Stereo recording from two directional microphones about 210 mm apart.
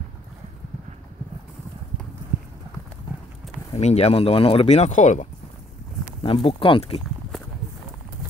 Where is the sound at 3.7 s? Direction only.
30° left (ahead or behind).